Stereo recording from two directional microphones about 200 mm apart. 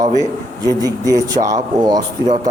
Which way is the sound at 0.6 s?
20° right (ahead or behind).